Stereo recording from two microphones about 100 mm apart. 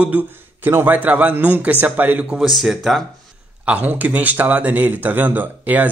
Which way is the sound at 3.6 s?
15° right (ahead or behind).